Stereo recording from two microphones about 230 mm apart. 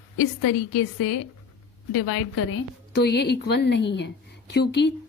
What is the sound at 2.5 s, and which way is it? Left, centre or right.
A woman's voice, left.